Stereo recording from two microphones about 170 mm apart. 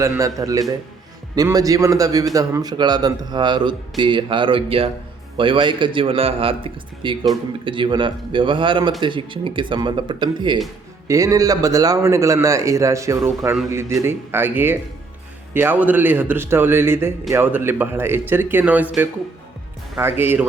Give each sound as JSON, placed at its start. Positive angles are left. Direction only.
{"t": 0.0, "sound": "a man's voice", "side_deg": -20}